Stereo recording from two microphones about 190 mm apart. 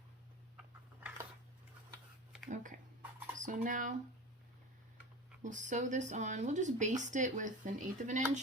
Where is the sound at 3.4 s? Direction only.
45° right (ahead or behind).